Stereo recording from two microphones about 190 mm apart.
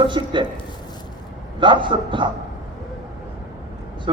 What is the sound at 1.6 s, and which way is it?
Speech, 25° right (ahead or behind).